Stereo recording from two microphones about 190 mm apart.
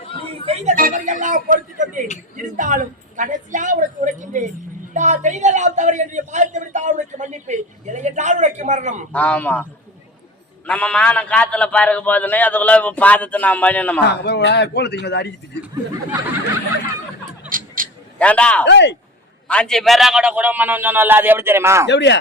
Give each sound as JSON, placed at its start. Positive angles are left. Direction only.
{"t": 0.3, "sound": "a woman's voice", "side_deg": -35}
{"t": 9.1, "sound": "a man's voice", "side_deg": 10}
{"t": 10.7, "sound": "a man's voice", "side_deg": 5}
{"t": 14.0, "sound": "speech", "side_deg": 60}
{"t": 17.5, "sound": "a sound", "side_deg": -10}
{"t": 18.2, "sound": "a man's voice", "side_deg": 5}
{"t": 18.6, "sound": "speech", "side_deg": 65}
{"t": 19.5, "sound": "a man's voice", "side_deg": 5}
{"t": 21.8, "sound": "speech", "side_deg": 65}